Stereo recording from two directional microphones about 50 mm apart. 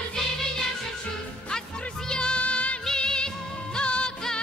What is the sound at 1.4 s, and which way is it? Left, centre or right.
Music, centre.